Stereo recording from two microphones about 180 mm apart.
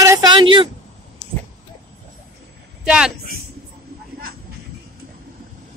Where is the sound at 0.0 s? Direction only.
20° right (ahead or behind).